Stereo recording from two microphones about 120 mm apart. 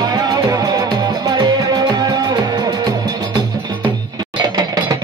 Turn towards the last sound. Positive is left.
turn(degrees=-35)  # may be behind; listen again after turning